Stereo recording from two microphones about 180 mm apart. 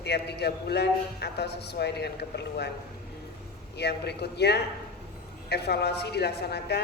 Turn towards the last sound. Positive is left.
turn(degrees=65)  # may be behind; listen again after turning